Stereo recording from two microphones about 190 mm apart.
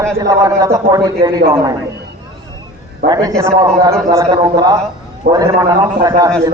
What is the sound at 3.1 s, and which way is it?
A man's voice, 20° right (ahead or behind).